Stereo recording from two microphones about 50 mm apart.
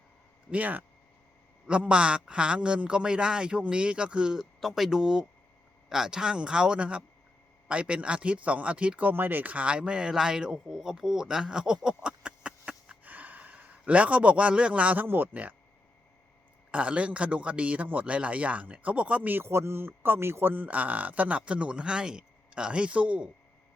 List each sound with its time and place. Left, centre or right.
0.5 s speech: right
1.6 s a man's voice: right
4.6 s a man's voice: centre; by 9.0 s right
9.0 s speech: right
13.1 s a sound: right
14.9 s speech: right
16.7 s a man's voice: right
19.5 s speech: right
20.7 s a man's voice: right